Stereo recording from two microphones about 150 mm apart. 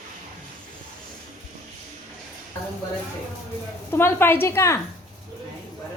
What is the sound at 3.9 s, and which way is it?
Speech, 15° left (ahead or behind).